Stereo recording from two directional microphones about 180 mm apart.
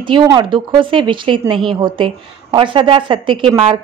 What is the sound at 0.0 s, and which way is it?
A woman's voice, 25° right (ahead or behind).